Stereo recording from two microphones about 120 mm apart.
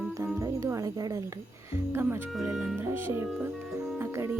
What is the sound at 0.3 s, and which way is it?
Music, 25° right (ahead or behind).